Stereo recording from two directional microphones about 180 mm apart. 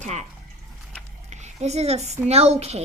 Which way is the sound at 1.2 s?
40° right (ahead or behind).